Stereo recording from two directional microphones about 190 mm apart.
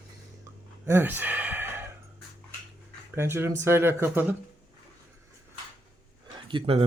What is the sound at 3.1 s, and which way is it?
Speech, 10° right (ahead or behind).